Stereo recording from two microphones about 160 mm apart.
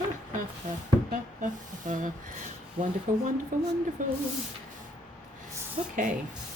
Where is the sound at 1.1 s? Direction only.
55° right (ahead or behind).